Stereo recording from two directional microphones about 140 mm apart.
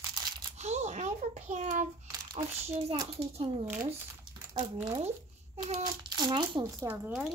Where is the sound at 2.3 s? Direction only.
50° right (ahead or behind).